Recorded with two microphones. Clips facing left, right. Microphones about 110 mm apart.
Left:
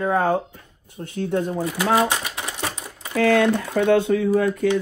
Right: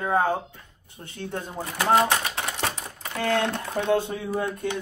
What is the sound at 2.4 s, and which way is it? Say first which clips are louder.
Typewriter: even; 15° left (ahead or behind).